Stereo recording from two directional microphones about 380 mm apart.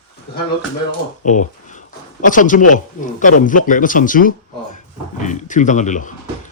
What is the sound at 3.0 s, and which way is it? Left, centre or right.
Speech, left.